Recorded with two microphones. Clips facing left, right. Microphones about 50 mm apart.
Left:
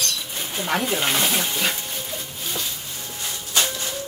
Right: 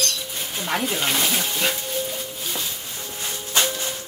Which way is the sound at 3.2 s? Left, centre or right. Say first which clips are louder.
Right 1 dB; right.